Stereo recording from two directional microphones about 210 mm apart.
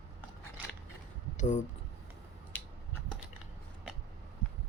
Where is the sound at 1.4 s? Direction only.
35° left (ahead or behind).